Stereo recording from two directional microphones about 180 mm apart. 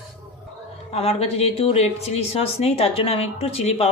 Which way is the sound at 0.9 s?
35° left (ahead or behind).